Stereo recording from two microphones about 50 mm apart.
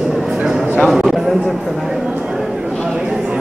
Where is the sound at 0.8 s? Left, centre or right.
Centre.